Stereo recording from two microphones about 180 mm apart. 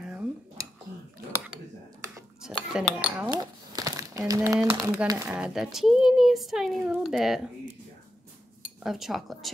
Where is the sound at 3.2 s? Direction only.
20° right (ahead or behind).